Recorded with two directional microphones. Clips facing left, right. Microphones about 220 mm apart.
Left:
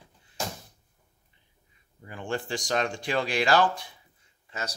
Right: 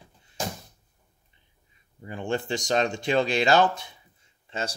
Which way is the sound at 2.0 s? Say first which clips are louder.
Right 4 dB; 25° right (ahead or behind).